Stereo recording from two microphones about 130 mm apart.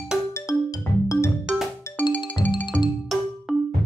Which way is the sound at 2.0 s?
10° left (ahead or behind).